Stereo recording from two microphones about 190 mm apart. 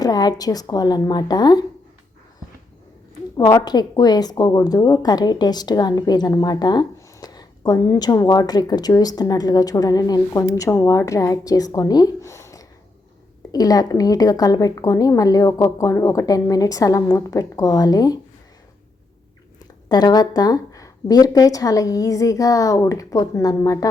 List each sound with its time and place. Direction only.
0.0 s speech: 20° left (ahead or behind)
3.3 s a woman's voice: 20° left (ahead or behind)
19.9 s a woman's voice: 20° left (ahead or behind)